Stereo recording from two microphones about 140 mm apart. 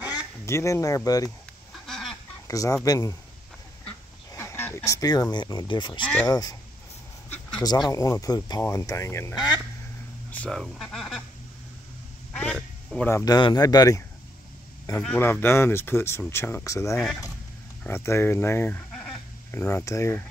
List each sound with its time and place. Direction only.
0.1 s speech: 20° left (ahead or behind)
1.9 s fowl: centre (ahead or behind)
2.4 s speech: 25° left (ahead or behind)
4.3 s speech: 20° left (ahead or behind)
7.6 s speech: 30° left (ahead or behind)
9.3 s speech: 5° right (ahead or behind)
10.3 s speech: 5° left (ahead or behind)
12.3 s quack: 10° left (ahead or behind)
13.0 s speech: 25° left (ahead or behind)
14.9 s speech: 15° left (ahead or behind)
16.9 s speech: 5° left (ahead or behind)
17.8 s speech: 15° left (ahead or behind)